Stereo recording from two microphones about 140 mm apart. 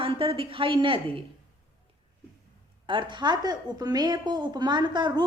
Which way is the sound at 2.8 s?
35° right (ahead or behind).